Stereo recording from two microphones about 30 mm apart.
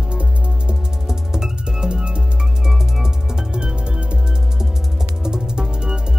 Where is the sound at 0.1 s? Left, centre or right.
Right.